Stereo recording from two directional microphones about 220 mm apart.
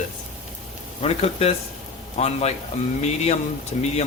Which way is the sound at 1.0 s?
30° left (ahead or behind).